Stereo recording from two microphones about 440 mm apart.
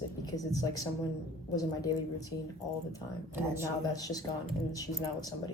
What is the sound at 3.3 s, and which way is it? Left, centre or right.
Speech, centre.